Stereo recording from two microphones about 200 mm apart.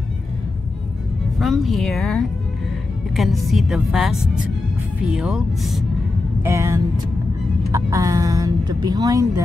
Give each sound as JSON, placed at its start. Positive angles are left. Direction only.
{"t": 1.4, "sound": "music", "side_deg": 0}
{"t": 6.4, "sound": "speech", "side_deg": -15}